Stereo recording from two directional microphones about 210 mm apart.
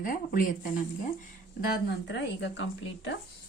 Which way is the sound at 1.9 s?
55° left (ahead or behind).